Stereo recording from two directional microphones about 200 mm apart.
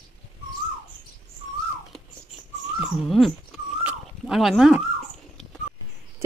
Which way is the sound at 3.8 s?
Centre (ahead or behind).